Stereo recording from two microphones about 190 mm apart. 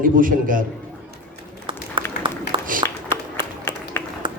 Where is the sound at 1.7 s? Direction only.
25° right (ahead or behind).